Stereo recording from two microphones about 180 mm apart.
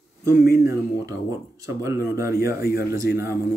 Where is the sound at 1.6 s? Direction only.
15° right (ahead or behind).